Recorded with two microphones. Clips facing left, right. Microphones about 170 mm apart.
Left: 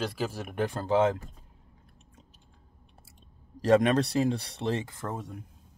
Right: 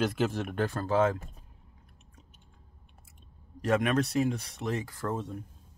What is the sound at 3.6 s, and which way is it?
Speech, 30° left (ahead or behind).